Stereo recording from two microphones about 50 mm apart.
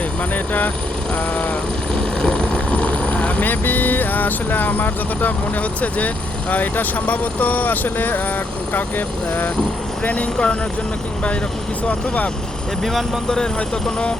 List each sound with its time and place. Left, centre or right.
2.0 s vehicle: centre
2.7 s helicopter: left
3.4 s speech: left
6.5 s speech: left
11.9 s speech: left
12.8 s speech: centre
13.2 s speech: centre